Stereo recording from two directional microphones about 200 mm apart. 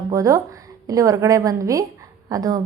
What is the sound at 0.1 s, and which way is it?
A woman's voice, 15° right (ahead or behind).